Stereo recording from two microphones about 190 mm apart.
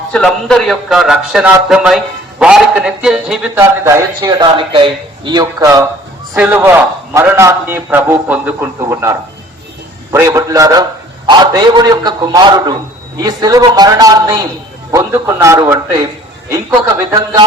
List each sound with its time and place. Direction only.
0.1 s a man's voice: 5° left (ahead or behind)
3.5 s a man's voice: 15° right (ahead or behind)